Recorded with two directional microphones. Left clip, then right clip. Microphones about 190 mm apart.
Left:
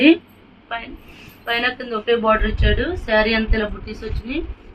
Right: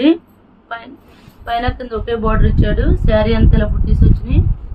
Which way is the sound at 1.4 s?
40° right (ahead or behind).